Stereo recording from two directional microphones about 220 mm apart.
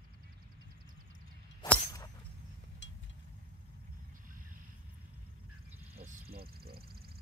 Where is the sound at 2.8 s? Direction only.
55° left (ahead or behind).